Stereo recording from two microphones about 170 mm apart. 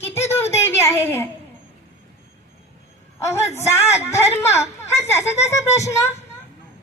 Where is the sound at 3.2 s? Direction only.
15° left (ahead or behind).